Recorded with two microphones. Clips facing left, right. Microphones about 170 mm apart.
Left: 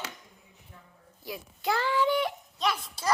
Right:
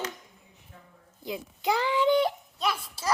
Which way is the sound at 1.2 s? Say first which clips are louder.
Right 3 dB; 20° right (ahead or behind).